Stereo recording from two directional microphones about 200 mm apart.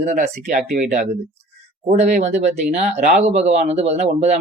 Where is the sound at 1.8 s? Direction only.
35° right (ahead or behind).